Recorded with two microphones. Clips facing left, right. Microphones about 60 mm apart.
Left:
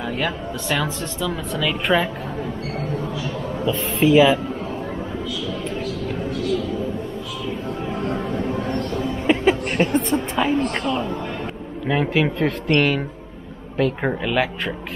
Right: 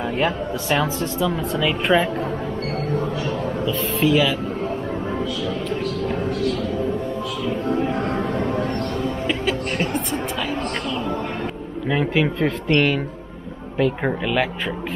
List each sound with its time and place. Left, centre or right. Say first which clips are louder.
0.2 s speech: right 3 dB; centre
3.6 s speech: left 3 dB; left
7.8 s a sound: right 3 dB; right
9.3 s chuckle: left 9 dB; left
11.9 s speech: even; centre